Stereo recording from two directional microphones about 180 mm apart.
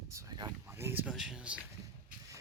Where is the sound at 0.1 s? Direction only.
20° right (ahead or behind); by 1.5 s 5° right (ahead or behind).